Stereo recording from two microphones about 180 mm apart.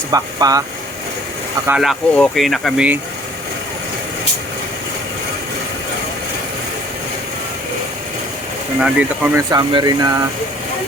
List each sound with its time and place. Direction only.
0.1 s speech: 20° right (ahead or behind)
1.6 s speech: 5° right (ahead or behind)
8.8 s speech: 5° right (ahead or behind)
9.5 s speech: 20° right (ahead or behind)